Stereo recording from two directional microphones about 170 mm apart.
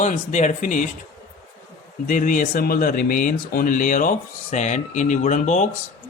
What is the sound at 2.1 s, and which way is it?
Speech, 50° left (ahead or behind).